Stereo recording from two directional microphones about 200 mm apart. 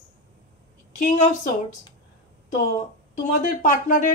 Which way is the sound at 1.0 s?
40° left (ahead or behind).